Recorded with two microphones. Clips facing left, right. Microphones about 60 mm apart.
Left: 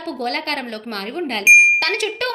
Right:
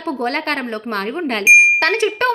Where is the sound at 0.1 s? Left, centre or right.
Right.